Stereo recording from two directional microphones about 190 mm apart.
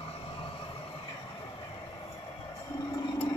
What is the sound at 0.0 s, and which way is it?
Vehicle, 30° left (ahead or behind).